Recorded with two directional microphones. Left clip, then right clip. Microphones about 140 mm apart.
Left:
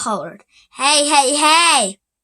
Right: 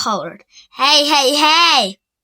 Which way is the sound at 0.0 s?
20° right (ahead or behind).